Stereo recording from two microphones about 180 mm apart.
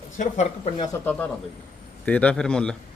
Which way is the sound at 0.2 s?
40° left (ahead or behind).